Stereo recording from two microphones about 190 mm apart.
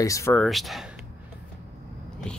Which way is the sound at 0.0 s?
15° left (ahead or behind).